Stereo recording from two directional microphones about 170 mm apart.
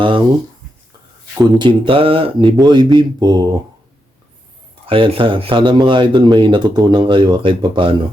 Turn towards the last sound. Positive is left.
turn(degrees=-30)  # may be behind; listen again after turning